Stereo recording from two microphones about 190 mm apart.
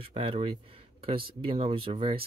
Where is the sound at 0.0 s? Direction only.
30° right (ahead or behind).